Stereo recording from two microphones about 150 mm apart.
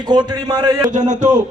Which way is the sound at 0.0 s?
30° right (ahead or behind).